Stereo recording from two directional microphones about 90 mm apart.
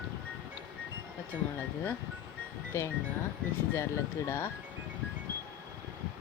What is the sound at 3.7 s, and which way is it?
Speech, 30° left (ahead or behind).